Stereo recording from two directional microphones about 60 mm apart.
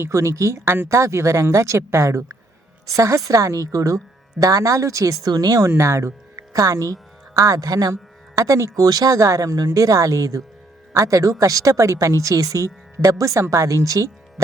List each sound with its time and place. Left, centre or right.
0.0 s speech: right
0.6 s speech: right
0.9 s a woman's voice: right
5.2 s speech: right
5.7 s speech: right
6.3 s a woman's voice: right